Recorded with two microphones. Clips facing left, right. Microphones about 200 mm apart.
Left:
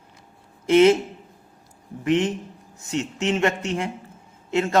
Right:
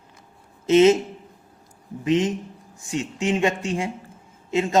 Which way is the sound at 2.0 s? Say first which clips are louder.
Even; 15° right (ahead or behind).